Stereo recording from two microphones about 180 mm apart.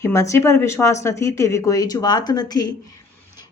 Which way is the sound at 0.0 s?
15° left (ahead or behind).